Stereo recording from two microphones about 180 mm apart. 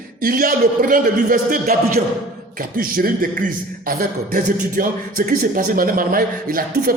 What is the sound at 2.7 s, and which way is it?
A man's voice, 50° right (ahead or behind).